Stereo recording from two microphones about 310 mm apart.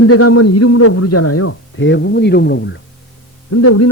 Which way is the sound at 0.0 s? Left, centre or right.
Left.